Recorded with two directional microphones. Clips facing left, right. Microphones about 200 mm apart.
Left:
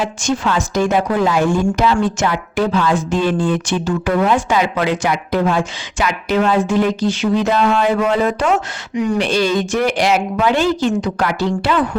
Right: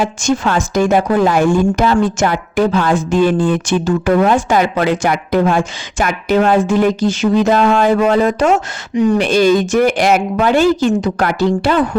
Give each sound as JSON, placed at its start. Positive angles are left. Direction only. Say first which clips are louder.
{"t": 0.0, "sound": "a woman's voice", "louder": "right 3 dB", "side_deg": -45}
{"t": 9.2, "sound": "a woman's voice", "louder": "right 5 dB", "side_deg": -50}